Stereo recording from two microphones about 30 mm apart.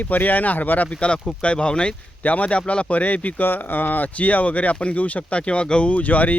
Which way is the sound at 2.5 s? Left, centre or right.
Left.